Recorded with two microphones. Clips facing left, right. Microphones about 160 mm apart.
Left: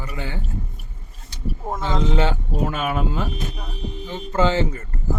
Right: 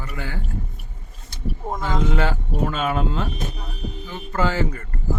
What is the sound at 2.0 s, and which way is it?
Speech, 25° left (ahead or behind).